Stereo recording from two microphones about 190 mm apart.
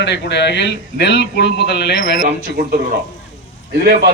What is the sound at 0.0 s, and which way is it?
A man's voice, 65° left (ahead or behind).